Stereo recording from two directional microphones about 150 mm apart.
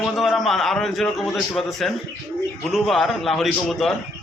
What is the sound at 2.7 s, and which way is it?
A man's voice, centre (ahead or behind).